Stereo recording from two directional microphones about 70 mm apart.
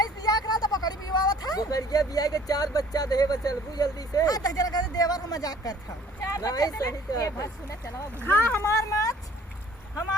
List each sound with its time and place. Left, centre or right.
0.0 s speech: left
8.2 s speech: left
8.7 s speech: left